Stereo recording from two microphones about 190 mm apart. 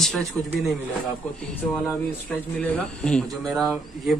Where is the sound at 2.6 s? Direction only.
5° left (ahead or behind).